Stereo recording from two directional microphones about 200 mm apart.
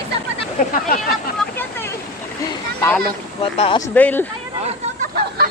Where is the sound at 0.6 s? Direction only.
45° left (ahead or behind).